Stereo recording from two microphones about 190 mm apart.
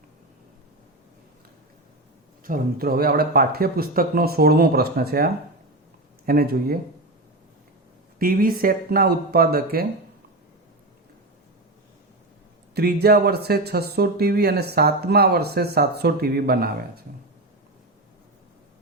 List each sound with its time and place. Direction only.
2.4 s speech: 50° right (ahead or behind)
8.2 s speech: 50° right (ahead or behind)
12.7 s speech: 55° right (ahead or behind)